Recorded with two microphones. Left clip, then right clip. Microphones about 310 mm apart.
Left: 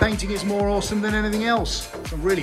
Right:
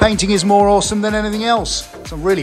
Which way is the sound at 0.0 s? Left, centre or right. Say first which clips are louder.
Right 9 dB; centre.